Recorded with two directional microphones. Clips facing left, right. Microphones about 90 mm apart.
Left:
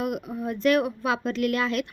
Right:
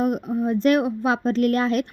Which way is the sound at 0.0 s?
35° right (ahead or behind).